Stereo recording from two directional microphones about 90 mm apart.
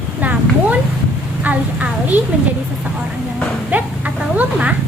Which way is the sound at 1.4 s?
15° right (ahead or behind).